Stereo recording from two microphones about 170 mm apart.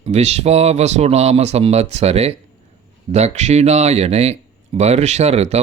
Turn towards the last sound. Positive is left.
turn(degrees=-40)  # may be behind; listen again after turning